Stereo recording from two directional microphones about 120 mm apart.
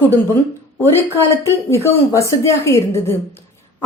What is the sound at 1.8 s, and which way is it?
A woman's voice, 25° left (ahead or behind).